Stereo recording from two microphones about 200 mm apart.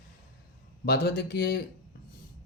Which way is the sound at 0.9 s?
50° left (ahead or behind).